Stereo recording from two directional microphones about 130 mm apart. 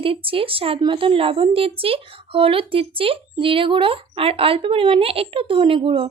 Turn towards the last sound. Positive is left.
turn(degrees=-45)  # may be behind; listen again after turning